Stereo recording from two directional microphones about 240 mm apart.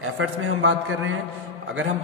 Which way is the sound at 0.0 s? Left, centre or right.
Right.